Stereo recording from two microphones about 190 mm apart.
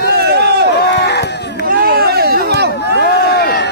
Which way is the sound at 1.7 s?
55° right (ahead or behind).